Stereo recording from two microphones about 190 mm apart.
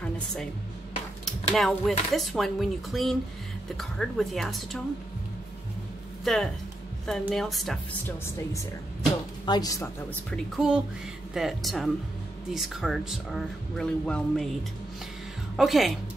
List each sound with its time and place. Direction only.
1.2 s speech: centre (ahead or behind)
6.2 s speech: 5° left (ahead or behind)
9.5 s a woman's voice: 20° left (ahead or behind)
10.3 s speech: centre (ahead or behind)
15.5 s speech: centre (ahead or behind)